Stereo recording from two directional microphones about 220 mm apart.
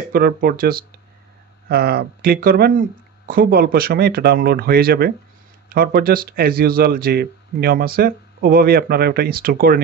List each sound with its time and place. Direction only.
0.1 s speech: 45° right (ahead or behind)